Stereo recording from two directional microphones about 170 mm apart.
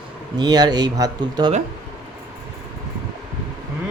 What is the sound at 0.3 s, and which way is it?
Speech, 25° right (ahead or behind).